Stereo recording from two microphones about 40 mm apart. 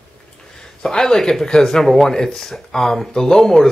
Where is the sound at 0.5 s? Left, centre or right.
Centre.